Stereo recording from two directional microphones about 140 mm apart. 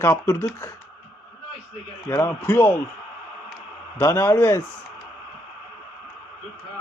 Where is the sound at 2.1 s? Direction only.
15° left (ahead or behind).